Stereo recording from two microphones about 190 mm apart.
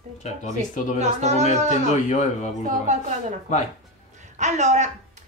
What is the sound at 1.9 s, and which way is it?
Speech, 40° left (ahead or behind).